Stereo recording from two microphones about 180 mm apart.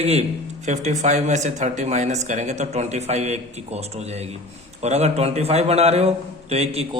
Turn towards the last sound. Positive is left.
turn(degrees=-35)  # may be behind; listen again after turning